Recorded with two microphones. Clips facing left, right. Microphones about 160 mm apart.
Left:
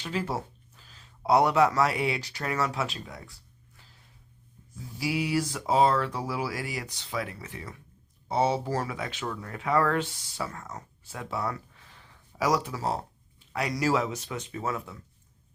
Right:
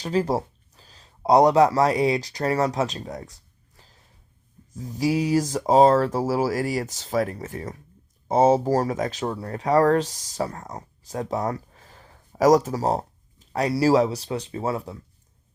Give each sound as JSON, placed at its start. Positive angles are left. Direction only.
{"t": 0.0, "sound": "speech", "side_deg": -40}